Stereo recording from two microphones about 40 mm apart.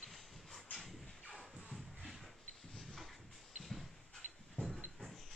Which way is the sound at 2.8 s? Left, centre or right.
Centre.